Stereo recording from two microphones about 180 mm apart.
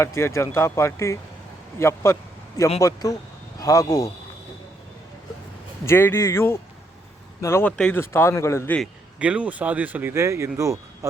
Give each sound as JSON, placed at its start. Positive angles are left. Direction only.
{"t": 0.0, "sound": "a man's voice", "side_deg": 15}
{"t": 5.8, "sound": "speech", "side_deg": 15}
{"t": 9.1, "sound": "speech", "side_deg": -5}